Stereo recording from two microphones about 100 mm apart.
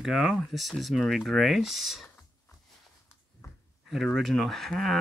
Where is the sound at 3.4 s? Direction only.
30° left (ahead or behind).